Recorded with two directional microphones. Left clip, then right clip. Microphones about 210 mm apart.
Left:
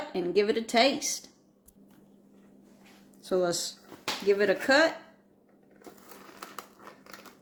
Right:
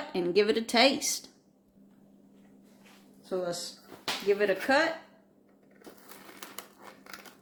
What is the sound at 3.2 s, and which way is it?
Speech, 55° left (ahead or behind).